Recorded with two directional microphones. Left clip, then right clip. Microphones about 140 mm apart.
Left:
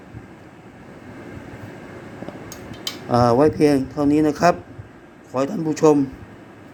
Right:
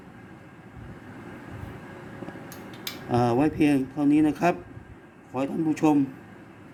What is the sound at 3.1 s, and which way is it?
A man's voice, 10° left (ahead or behind).